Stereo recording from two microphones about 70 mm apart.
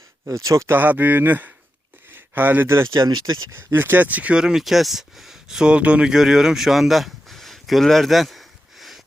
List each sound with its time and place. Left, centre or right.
0.3 s speech: right
0.7 s speech: right
3.0 s speech: right
3.5 s speech: right; by 5.7 s centre
5.7 s speech: centre